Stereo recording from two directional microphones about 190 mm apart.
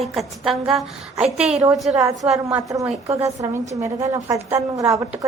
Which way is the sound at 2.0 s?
20° right (ahead or behind).